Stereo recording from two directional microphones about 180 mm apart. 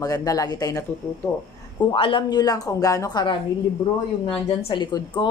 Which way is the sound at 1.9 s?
25° left (ahead or behind).